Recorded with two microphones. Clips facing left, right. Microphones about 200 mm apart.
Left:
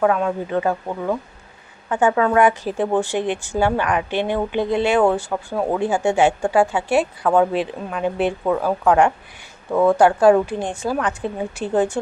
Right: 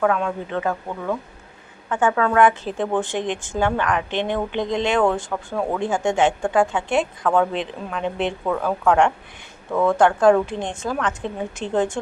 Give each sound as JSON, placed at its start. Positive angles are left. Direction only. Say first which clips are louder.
{"t": 0.0, "sound": "a woman's voice", "louder": "left 2 dB", "side_deg": 15}